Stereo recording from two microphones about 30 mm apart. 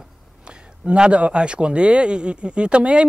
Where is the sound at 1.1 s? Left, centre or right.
Right.